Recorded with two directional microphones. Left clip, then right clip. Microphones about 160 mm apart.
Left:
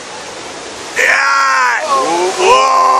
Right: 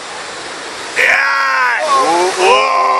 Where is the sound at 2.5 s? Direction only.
10° left (ahead or behind).